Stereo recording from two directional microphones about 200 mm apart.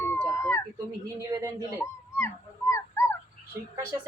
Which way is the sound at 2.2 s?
15° left (ahead or behind).